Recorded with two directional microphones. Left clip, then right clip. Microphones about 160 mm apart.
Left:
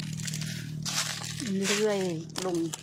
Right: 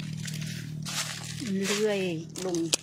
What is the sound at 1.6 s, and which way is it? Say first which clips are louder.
Speech: left 1 dB; 70° left (ahead or behind).